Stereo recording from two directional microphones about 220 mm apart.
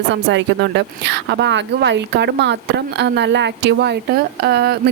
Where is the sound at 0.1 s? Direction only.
55° right (ahead or behind).